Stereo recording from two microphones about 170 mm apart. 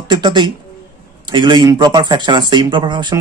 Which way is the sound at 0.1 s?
25° right (ahead or behind).